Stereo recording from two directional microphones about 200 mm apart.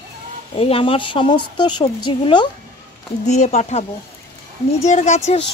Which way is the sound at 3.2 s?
35° left (ahead or behind).